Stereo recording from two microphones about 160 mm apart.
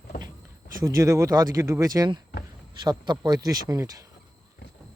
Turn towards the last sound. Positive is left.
turn(degrees=-20)  # may be behind; listen again after turning